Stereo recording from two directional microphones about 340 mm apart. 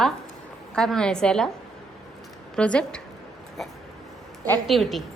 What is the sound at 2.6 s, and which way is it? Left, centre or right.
A woman's voice, centre.